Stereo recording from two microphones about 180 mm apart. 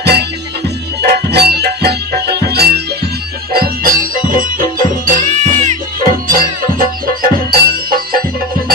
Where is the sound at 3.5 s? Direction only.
55° right (ahead or behind).